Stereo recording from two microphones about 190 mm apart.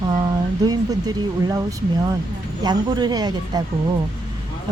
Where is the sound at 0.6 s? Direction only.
20° right (ahead or behind).